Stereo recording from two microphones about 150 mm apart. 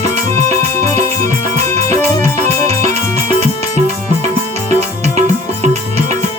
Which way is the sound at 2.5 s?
20° left (ahead or behind).